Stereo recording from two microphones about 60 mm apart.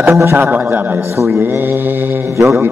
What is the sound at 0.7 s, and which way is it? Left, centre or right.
Mantra, right.